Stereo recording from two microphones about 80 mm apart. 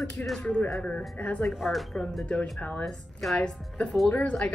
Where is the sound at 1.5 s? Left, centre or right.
Centre.